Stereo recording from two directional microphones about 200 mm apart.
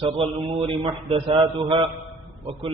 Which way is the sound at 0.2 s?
30° right (ahead or behind).